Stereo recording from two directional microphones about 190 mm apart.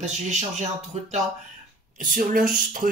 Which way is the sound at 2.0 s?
45° right (ahead or behind).